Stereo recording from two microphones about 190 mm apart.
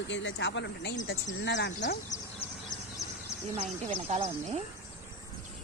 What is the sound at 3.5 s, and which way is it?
Speech, 30° right (ahead or behind).